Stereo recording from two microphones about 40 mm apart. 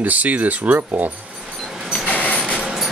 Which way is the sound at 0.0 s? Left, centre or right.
Right.